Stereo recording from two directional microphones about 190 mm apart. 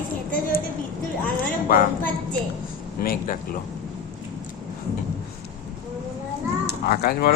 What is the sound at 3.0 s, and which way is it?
Speech, 50° left (ahead or behind).